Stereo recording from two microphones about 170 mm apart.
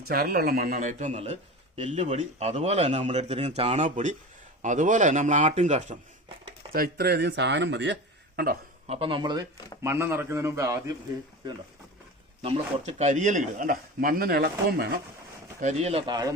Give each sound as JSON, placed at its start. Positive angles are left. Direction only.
{"t": 0.1, "sound": "speech", "side_deg": -65}
{"t": 6.2, "sound": "a sound", "side_deg": -35}
{"t": 6.7, "sound": "speech", "side_deg": -65}
{"t": 8.9, "sound": "speech", "side_deg": -30}
{"t": 9.8, "sound": "a man's voice", "side_deg": -15}
{"t": 12.4, "sound": "speech", "side_deg": -40}
{"t": 15.6, "sound": "speech", "side_deg": -40}